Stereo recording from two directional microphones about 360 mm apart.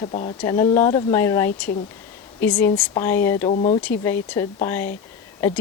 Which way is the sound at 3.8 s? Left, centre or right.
Centre.